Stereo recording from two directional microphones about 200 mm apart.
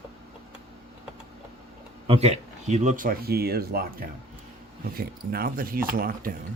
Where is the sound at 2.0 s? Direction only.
30° right (ahead or behind); by 6.3 s 45° right (ahead or behind).